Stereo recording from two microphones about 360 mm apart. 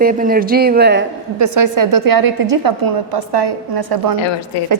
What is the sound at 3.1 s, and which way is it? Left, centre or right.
A woman's voice, right.